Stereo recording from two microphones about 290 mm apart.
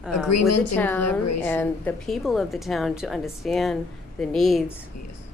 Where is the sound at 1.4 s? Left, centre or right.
Centre.